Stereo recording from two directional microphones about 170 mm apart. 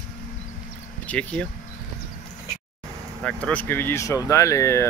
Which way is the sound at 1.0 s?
10° left (ahead or behind).